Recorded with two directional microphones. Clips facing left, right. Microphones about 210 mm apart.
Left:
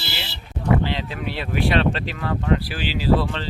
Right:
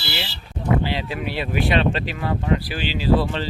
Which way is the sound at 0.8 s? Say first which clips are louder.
Right 1 dB; 10° right (ahead or behind).